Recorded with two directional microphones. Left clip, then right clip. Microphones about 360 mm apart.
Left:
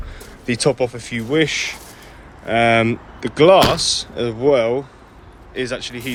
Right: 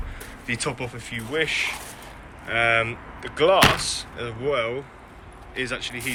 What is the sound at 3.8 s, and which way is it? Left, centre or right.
Speech, centre.